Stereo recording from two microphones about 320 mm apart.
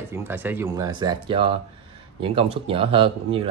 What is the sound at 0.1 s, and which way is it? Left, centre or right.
Speech, centre.